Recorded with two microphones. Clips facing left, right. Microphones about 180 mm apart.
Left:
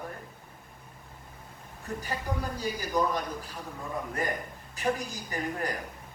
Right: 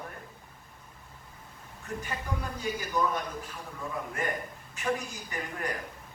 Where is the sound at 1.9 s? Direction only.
35° left (ahead or behind).